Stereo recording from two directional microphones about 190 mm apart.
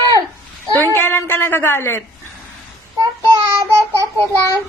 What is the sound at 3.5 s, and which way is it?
Child singing, 15° right (ahead or behind).